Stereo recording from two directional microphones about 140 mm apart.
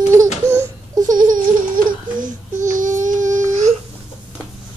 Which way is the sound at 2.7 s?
65° right (ahead or behind).